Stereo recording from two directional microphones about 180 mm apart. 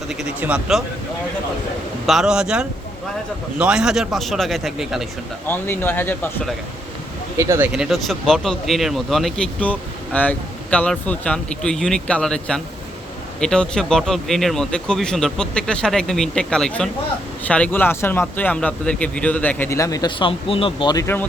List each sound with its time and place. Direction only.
0.1 s speech: 5° right (ahead or behind)
2.0 s speech: centre (ahead or behind)
5.5 s speech: 10° left (ahead or behind)
7.3 s speech: 15° right (ahead or behind)
7.7 s speech: centre (ahead or behind); by 21.2 s 15° left (ahead or behind)